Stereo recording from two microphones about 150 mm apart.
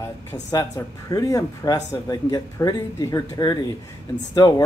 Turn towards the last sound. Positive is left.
turn(degrees=25)  # may be behind; listen again after turning